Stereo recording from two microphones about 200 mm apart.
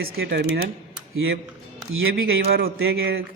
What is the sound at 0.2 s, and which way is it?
Speech, 55° right (ahead or behind).